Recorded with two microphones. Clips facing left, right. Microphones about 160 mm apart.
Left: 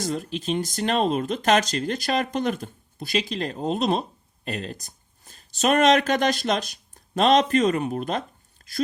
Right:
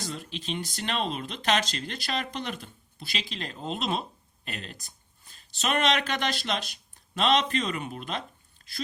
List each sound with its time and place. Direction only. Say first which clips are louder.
0.0 s speech: left 9 dB; 45° left (ahead or behind)